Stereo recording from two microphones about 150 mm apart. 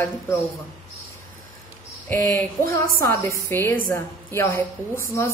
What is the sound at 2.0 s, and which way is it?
Speech, 15° left (ahead or behind).